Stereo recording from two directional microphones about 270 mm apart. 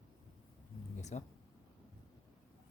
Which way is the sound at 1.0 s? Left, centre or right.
Left.